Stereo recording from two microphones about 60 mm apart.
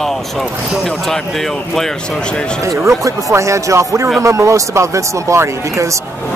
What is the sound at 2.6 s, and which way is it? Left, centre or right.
Speech, right.